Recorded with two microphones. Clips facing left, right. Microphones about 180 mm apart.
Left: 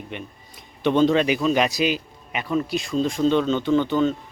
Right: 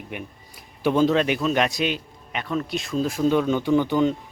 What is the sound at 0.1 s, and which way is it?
A man's voice, 10° right (ahead or behind).